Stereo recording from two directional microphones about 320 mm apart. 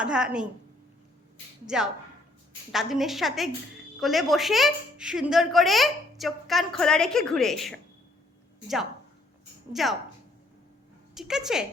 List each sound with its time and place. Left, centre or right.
0.0 s a woman's voice: centre
1.6 s a woman's voice: centre
11.1 s a woman's voice: centre